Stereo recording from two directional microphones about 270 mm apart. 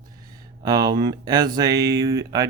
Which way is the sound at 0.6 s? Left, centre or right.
Centre.